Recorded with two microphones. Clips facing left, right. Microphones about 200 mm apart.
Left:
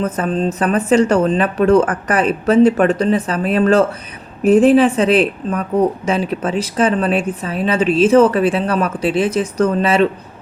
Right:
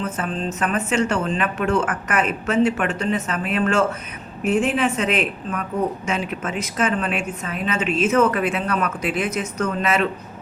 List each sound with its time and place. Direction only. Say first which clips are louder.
0.0 s speech: left 8 dB; 40° left (ahead or behind)